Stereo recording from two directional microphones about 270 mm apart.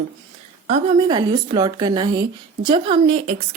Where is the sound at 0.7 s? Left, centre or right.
Centre.